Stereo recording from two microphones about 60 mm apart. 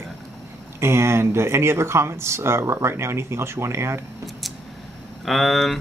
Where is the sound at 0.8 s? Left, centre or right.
Right.